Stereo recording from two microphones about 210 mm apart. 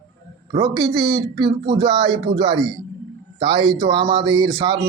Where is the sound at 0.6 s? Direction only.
20° right (ahead or behind).